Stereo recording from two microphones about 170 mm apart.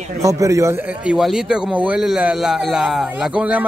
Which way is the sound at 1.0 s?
5° right (ahead or behind).